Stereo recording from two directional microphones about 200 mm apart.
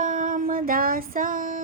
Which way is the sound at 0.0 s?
40° right (ahead or behind).